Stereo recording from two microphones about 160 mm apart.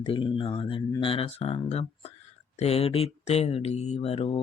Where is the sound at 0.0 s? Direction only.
30° left (ahead or behind).